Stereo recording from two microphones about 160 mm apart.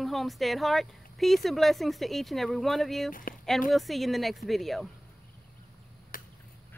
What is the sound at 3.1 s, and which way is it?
Speech, 60° left (ahead or behind).